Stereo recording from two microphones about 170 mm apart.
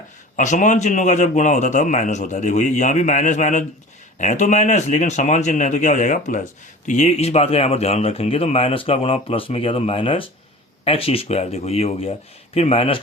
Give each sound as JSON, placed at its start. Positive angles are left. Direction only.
{"t": 0.3, "sound": "a man's voice", "side_deg": 45}